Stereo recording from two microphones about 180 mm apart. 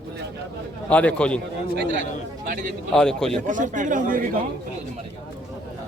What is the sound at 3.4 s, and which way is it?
Speech, 45° right (ahead or behind).